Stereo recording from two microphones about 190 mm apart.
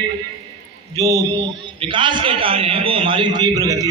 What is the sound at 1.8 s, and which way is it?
A man's voice, 25° right (ahead or behind).